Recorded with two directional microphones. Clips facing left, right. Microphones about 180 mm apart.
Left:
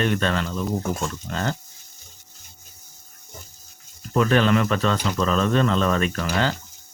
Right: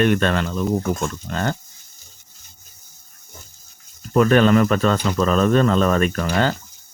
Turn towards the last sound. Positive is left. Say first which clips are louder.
# right 3 dB
turn(degrees=-45)  # may be behind; listen again after turning